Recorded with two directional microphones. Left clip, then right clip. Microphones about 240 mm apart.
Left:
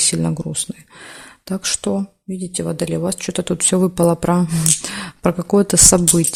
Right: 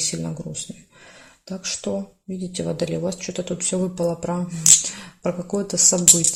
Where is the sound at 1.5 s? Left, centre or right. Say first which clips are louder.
Left 6 dB; left.